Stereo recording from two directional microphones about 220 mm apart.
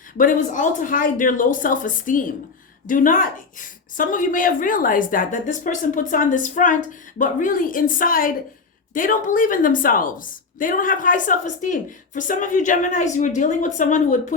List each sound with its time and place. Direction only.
0.2 s a woman's voice: 35° left (ahead or behind)